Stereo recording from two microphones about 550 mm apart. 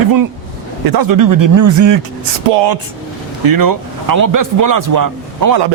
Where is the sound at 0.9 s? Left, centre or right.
Right.